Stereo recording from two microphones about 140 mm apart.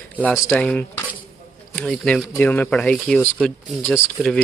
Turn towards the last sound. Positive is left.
turn(degrees=0)  # may be behind; listen again after turning